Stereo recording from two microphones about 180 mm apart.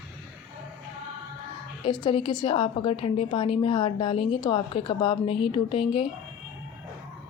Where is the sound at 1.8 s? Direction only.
25° left (ahead or behind).